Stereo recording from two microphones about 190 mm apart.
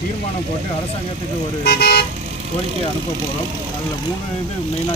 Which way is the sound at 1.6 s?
60° left (ahead or behind).